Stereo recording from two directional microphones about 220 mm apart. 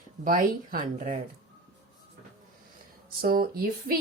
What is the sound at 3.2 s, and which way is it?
Speech, 40° right (ahead or behind).